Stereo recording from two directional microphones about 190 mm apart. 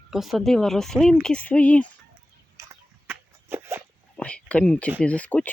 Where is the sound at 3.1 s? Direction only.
10° right (ahead or behind).